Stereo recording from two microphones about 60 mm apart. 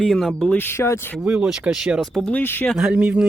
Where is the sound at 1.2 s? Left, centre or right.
Centre.